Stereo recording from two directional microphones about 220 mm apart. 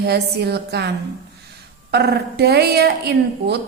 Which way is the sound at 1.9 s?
50° right (ahead or behind).